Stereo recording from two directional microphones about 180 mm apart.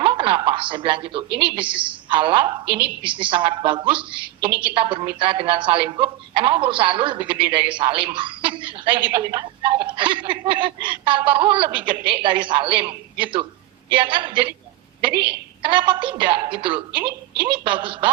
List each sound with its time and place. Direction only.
0.0 s a woman's voice: 30° right (ahead or behind)
15.1 s a woman's voice: 65° right (ahead or behind)
15.6 s speech: 25° right (ahead or behind)